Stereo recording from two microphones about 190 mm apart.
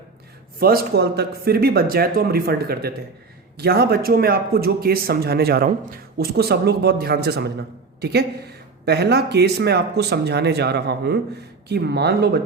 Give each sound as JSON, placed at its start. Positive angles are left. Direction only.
{"t": 0.6, "sound": "speech", "side_deg": -55}